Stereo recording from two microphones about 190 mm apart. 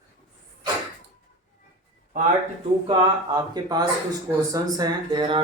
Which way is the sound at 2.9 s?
20° right (ahead or behind).